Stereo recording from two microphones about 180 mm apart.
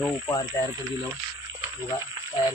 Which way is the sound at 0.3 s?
20° left (ahead or behind).